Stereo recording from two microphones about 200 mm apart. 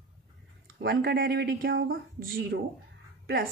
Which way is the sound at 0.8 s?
50° right (ahead or behind).